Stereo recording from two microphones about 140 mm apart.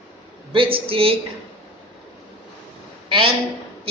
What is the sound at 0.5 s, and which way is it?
Speech, 40° right (ahead or behind).